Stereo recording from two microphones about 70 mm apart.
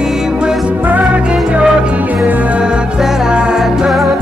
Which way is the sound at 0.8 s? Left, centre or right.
Right.